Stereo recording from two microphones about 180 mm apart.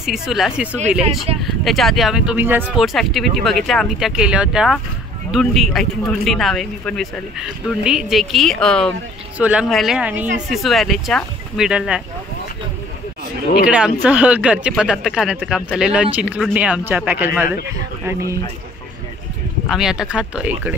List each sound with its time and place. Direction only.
0.0 s speech: centre (ahead or behind)
9.4 s speech: 5° right (ahead or behind)
13.7 s speech: 5° right (ahead or behind)
19.7 s speech: centre (ahead or behind)